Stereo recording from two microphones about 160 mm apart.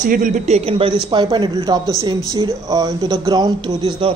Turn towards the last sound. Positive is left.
turn(degrees=-30)  # may be behind; listen again after turning